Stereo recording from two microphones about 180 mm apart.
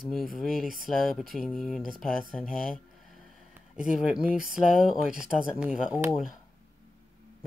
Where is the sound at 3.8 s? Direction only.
5° right (ahead or behind).